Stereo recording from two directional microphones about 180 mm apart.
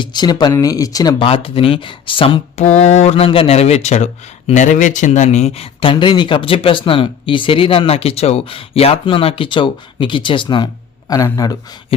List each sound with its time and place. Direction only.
0.0 s speech: 25° left (ahead or behind)